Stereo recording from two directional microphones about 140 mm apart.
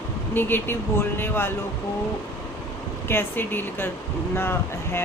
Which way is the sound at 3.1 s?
15° left (ahead or behind).